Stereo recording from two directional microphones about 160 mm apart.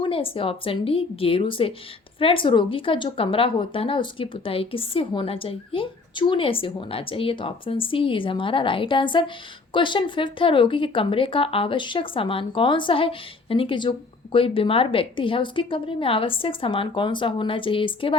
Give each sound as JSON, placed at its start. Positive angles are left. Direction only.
{"t": 0.0, "sound": "speech", "side_deg": 35}